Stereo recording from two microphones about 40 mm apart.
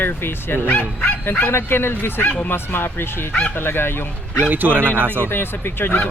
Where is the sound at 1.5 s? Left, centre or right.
Left.